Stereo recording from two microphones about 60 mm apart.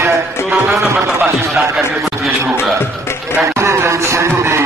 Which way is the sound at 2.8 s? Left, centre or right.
Left.